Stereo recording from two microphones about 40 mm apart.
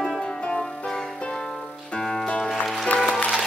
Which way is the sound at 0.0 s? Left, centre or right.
Left.